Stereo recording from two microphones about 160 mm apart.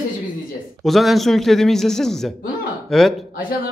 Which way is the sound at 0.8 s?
Centre (ahead or behind).